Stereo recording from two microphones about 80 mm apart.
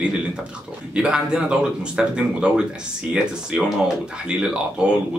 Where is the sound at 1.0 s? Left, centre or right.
Centre.